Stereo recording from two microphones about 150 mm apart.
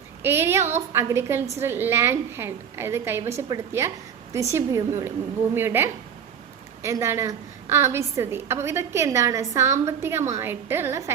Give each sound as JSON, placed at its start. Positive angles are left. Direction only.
{"t": 0.2, "sound": "a woman's voice", "side_deg": -15}